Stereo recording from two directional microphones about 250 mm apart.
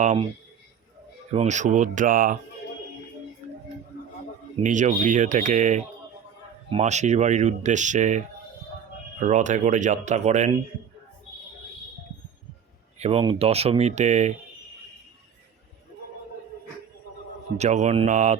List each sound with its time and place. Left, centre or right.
0.0 s speech: right
1.3 s speech: right
4.6 s speech: right
9.2 s speech: right
13.0 s speech: right
17.6 s speech: right